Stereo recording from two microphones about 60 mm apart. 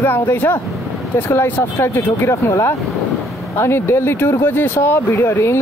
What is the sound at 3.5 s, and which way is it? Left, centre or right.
Speech, left.